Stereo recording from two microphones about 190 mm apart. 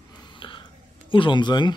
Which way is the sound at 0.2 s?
25° left (ahead or behind).